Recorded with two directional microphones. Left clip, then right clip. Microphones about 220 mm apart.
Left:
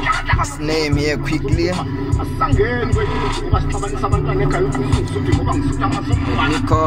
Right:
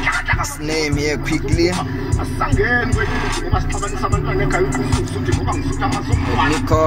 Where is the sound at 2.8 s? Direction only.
40° right (ahead or behind).